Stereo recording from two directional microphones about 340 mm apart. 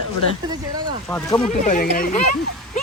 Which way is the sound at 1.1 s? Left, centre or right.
Centre.